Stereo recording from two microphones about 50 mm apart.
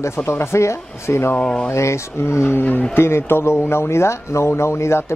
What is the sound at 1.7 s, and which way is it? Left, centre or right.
Speech, left.